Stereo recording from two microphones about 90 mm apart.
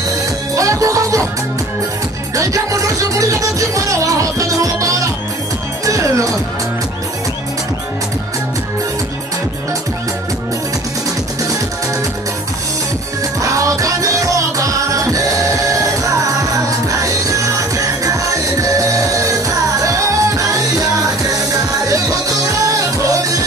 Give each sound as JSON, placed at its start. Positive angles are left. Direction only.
{"t": 0.6, "sound": "music", "side_deg": -40}
{"t": 2.3, "sound": "music", "side_deg": -40}
{"t": 13.4, "sound": "music", "side_deg": -40}
{"t": 21.8, "sound": "music", "side_deg": -40}